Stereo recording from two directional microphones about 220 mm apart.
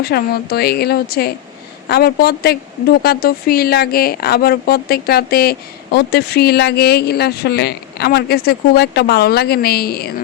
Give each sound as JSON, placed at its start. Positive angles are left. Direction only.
{"t": 0.0, "sound": "a woman's voice", "side_deg": 45}